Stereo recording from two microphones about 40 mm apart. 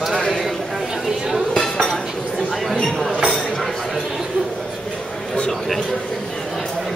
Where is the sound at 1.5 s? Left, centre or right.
Centre.